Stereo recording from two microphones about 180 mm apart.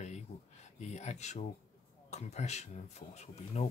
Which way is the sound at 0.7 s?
40° left (ahead or behind).